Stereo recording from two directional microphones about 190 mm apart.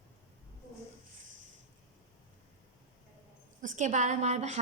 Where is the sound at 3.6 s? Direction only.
40° right (ahead or behind).